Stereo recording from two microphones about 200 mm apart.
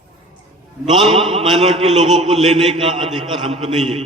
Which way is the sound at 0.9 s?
25° right (ahead or behind).